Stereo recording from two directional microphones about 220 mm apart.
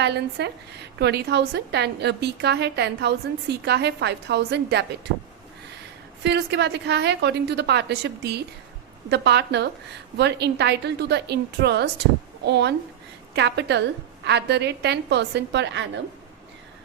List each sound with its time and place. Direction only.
0.0 s a woman's voice: 50° right (ahead or behind)
6.2 s a woman's voice: 50° right (ahead or behind)